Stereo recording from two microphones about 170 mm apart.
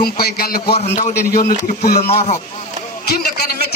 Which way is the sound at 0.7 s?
40° left (ahead or behind).